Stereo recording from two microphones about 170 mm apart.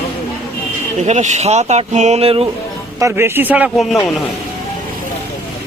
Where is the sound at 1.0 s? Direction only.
45° right (ahead or behind).